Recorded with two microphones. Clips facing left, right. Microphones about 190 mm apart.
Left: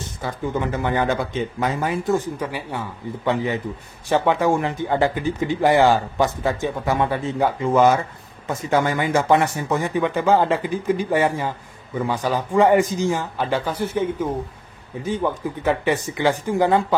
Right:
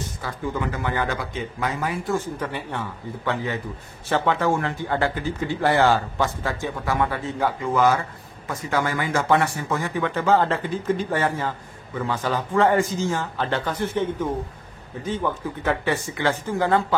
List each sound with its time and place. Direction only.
0.2 s speech: 25° left (ahead or behind)